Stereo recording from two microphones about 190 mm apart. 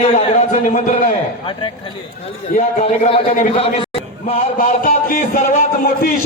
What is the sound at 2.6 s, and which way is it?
Speech, 35° left (ahead or behind).